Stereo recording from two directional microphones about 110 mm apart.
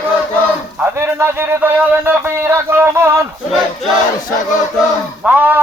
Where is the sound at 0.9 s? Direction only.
20° right (ahead or behind).